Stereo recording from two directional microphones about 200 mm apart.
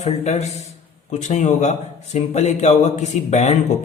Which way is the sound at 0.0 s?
30° left (ahead or behind).